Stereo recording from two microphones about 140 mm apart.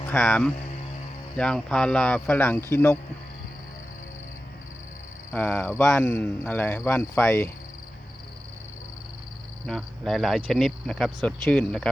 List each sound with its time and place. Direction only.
0.0 s music: 15° left (ahead or behind)
0.3 s speech: 10° left (ahead or behind)
5.3 s speech: 15° left (ahead or behind)
7.3 s cricket: 20° left (ahead or behind)
9.6 s speech: 5° left (ahead or behind)